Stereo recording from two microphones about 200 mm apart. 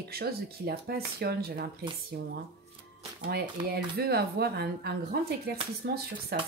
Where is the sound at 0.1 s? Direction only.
50° right (ahead or behind).